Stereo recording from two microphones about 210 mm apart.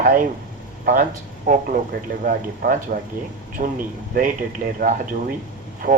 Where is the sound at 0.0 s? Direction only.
40° right (ahead or behind).